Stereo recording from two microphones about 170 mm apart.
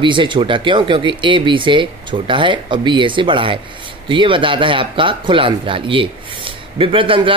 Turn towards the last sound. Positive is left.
turn(degrees=-30)  # may be behind; listen again after turning